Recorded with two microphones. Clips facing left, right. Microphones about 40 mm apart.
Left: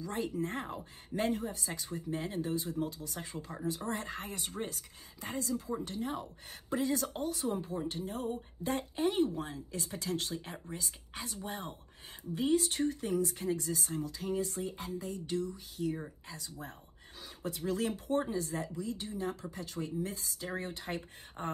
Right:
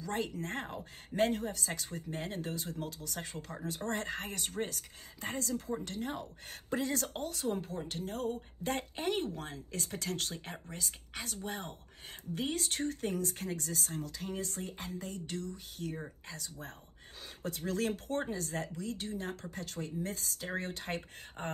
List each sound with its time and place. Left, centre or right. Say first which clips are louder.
0.0 s speech: left 1 dB; right
2.8 s speech: left 5 dB; right
3.2 s speech: even; right
21.4 s speech: left 1 dB; right